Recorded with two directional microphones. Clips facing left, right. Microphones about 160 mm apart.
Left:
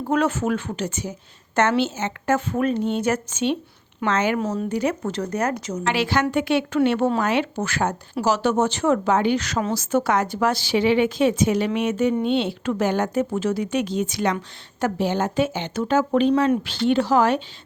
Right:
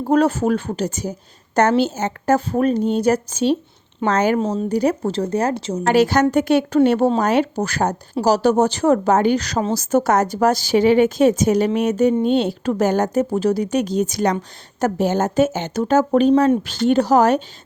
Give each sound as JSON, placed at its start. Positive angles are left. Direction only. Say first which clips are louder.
{"t": 0.0, "sound": "a woman's voice", "louder": "right 5 dB", "side_deg": -35}
{"t": 4.4, "sound": "speech", "louder": "right 4 dB", "side_deg": -30}
{"t": 5.8, "sound": "a woman's voice", "louder": "right 7 dB", "side_deg": -40}